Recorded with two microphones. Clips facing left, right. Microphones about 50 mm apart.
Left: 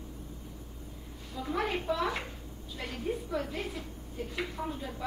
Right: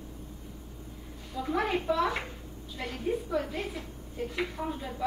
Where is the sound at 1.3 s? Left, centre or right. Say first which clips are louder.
Right 3 dB; centre.